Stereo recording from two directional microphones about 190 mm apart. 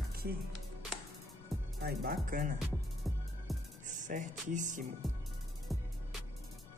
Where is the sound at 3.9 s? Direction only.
40° right (ahead or behind).